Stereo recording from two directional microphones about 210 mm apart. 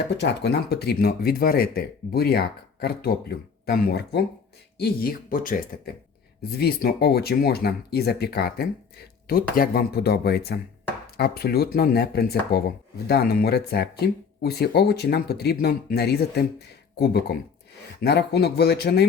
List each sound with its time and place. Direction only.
0.1 s speech: 50° left (ahead or behind)
18.0 s speech: 50° left (ahead or behind)